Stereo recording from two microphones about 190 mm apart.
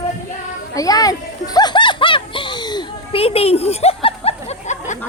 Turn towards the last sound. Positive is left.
turn(degrees=35)  # may be behind; listen again after turning